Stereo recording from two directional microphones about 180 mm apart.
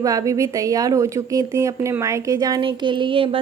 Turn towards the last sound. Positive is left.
turn(degrees=-30)  # may be behind; listen again after turning